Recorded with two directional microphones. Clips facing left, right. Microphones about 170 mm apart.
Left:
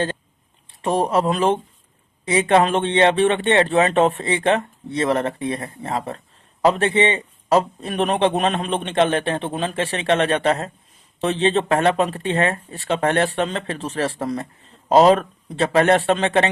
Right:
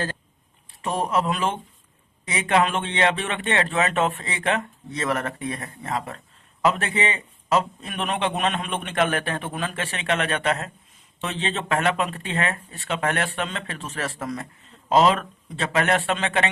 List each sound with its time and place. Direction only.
0.8 s a man's voice: 35° left (ahead or behind)